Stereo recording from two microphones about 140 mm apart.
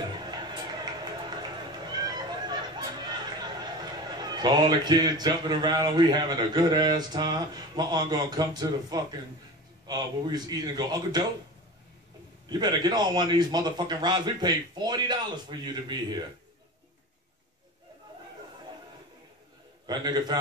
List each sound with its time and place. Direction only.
0.2 s cat: 30° right (ahead or behind)
9.8 s speech: 30° right (ahead or behind)
12.4 s a man's voice: 30° right (ahead or behind)
19.9 s a man's voice: 30° right (ahead or behind)